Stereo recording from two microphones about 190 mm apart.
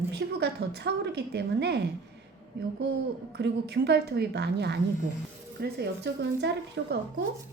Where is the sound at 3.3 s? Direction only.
65° right (ahead or behind).